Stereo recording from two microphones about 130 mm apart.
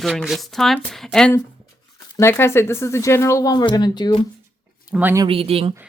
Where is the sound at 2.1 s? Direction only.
20° left (ahead or behind).